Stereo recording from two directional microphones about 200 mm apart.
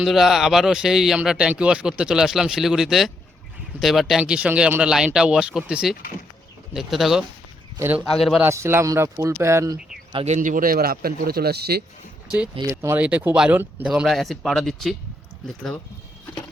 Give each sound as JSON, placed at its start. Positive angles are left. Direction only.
{"t": 0.0, "sound": "speech", "side_deg": 0}
{"t": 8.4, "sound": "speech", "side_deg": -15}
{"t": 10.1, "sound": "speech", "side_deg": -30}
{"t": 12.7, "sound": "speech", "side_deg": -10}